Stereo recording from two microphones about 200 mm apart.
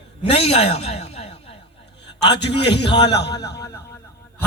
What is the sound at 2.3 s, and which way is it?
A man's voice, 60° left (ahead or behind).